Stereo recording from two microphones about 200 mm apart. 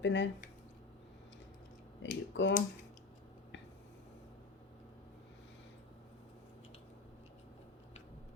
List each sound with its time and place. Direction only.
0.0 s speech: 65° left (ahead or behind)
2.0 s speech: 65° left (ahead or behind)